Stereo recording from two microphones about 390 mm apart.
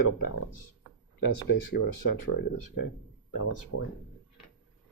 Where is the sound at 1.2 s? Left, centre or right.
Left.